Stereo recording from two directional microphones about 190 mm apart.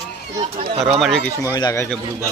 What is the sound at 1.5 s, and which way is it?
Speech, 20° left (ahead or behind).